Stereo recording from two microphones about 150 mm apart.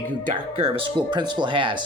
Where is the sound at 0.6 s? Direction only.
35° right (ahead or behind).